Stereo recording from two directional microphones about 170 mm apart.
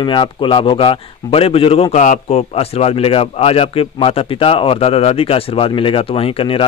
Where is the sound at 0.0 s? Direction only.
30° left (ahead or behind).